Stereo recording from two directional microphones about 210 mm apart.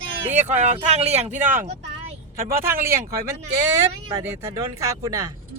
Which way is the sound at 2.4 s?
10° right (ahead or behind).